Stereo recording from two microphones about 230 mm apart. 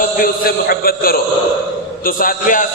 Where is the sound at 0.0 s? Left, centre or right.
Left.